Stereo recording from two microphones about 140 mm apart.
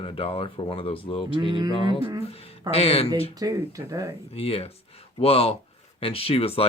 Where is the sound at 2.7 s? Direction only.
45° left (ahead or behind).